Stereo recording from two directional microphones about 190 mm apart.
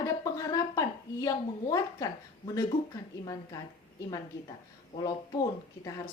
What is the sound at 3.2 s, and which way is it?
Speech, 20° left (ahead or behind).